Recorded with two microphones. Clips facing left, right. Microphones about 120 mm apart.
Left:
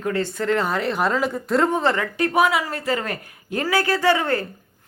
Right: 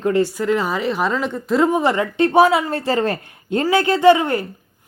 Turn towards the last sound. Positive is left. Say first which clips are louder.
# right 6 dB
turn(degrees=-15)  # may be behind; listen again after turning